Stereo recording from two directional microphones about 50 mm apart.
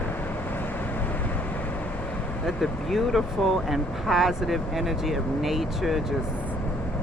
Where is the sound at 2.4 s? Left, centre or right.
Centre.